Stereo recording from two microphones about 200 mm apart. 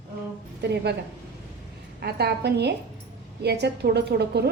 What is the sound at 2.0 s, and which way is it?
A woman's voice, 55° right (ahead or behind).